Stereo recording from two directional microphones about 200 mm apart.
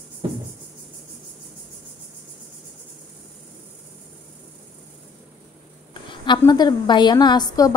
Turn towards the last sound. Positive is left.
turn(degrees=20)  # may be behind; listen again after turning